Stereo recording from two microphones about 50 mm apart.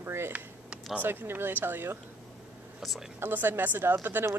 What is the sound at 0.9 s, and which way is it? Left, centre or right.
A woman's voice, right.